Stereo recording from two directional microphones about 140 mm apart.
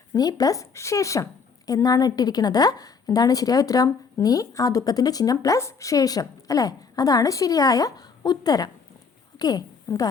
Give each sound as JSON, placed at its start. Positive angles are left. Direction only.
{"t": 0.1, "sound": "a woman's voice", "side_deg": 25}